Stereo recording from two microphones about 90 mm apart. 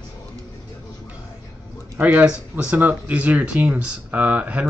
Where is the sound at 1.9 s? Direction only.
15° right (ahead or behind).